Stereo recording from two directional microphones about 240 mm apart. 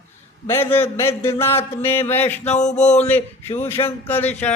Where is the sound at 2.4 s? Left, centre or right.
Left.